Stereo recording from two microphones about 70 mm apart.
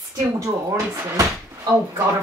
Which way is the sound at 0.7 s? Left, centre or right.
Right.